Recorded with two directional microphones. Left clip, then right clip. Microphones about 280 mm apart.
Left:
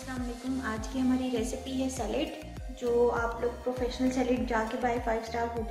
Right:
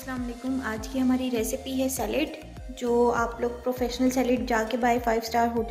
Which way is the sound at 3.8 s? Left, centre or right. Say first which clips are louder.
Right 4 dB; right.